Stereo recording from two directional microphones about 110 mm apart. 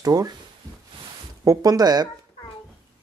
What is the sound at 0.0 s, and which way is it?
Speech, 35° right (ahead or behind).